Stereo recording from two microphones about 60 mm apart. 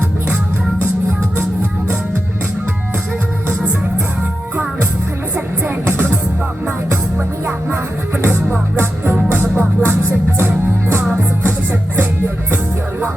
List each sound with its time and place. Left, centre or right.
3.6 s music: centre
5.6 s music: right
8.2 s music: right